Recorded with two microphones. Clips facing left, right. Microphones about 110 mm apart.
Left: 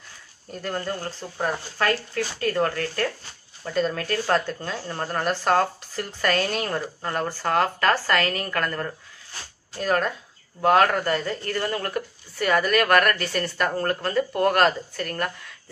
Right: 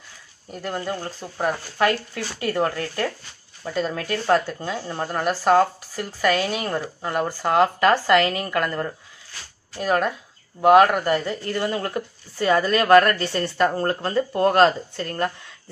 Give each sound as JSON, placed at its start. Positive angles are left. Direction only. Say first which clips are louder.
{"t": 0.5, "sound": "speech", "louder": "right 1 dB", "side_deg": -10}
{"t": 3.6, "sound": "speech", "louder": "left 1 dB", "side_deg": -5}